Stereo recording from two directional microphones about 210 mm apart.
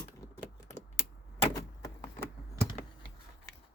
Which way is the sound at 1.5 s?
15° left (ahead or behind).